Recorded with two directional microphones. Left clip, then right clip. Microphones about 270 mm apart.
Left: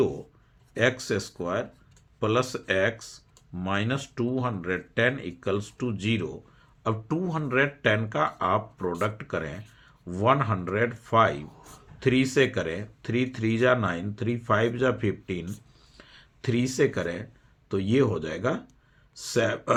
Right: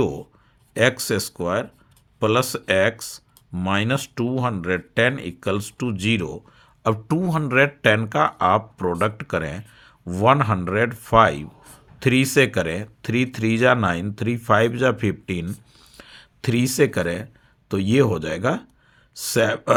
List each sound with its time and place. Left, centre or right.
0.7 s speech: right
15.8 s a sound: right
17.7 s speech: right